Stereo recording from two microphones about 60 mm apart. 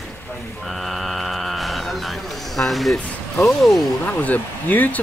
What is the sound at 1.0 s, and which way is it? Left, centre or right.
Hum, centre.